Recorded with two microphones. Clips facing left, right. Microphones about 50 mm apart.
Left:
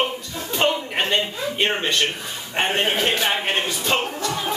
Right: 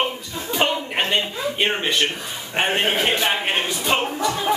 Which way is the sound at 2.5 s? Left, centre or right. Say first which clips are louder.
Right 1 dB; centre.